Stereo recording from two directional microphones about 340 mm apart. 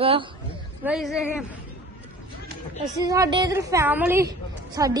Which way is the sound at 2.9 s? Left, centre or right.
Centre.